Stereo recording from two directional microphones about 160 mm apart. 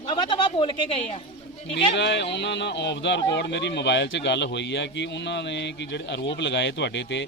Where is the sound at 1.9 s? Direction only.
90° left.